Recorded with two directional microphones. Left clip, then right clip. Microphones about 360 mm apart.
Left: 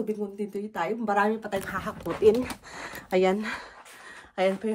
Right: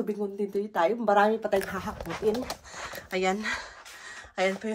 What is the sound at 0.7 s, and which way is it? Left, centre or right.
Speech, centre.